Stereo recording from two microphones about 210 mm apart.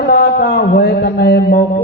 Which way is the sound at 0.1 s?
45° left (ahead or behind).